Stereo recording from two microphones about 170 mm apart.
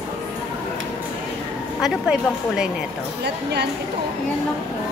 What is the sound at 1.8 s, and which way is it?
Speech, 5° right (ahead or behind).